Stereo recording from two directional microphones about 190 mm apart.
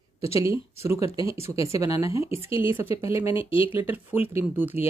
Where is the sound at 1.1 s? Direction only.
30° left (ahead or behind).